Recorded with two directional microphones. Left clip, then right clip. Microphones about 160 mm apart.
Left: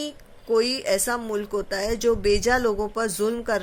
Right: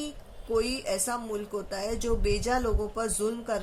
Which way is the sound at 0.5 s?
50° left (ahead or behind).